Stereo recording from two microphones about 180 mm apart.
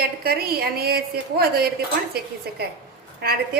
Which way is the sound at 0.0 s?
60° right (ahead or behind).